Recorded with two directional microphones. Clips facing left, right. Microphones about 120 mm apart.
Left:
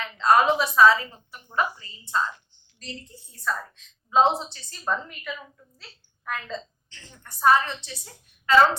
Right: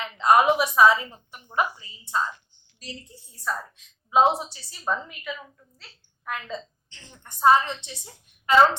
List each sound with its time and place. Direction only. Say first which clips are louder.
0.0 s a woman's voice: right 1 dB; 15° right (ahead or behind)
6.9 s a woman's voice: even; 20° right (ahead or behind)